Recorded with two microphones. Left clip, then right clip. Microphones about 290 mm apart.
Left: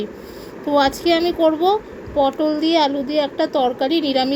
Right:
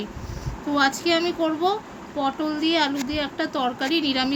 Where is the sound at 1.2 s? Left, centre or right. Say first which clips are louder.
Left 7 dB; centre.